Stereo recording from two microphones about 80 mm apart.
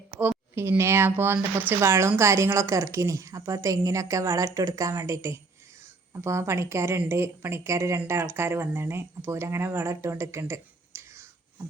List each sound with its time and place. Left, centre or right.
0.5 s speech: right